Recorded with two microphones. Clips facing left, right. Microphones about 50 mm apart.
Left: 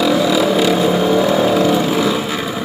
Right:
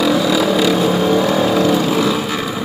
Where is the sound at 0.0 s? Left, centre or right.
Left.